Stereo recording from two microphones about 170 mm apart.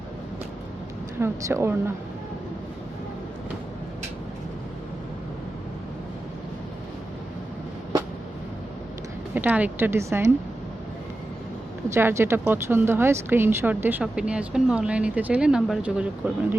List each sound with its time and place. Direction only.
1.2 s speech: 15° right (ahead or behind)
9.3 s speech: 10° right (ahead or behind)
11.9 s speech: 15° right (ahead or behind)